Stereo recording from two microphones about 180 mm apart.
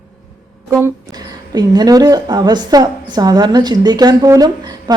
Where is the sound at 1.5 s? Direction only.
20° right (ahead or behind).